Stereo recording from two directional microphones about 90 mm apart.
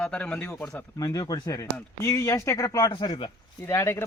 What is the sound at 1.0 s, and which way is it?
Speech, 40° left (ahead or behind).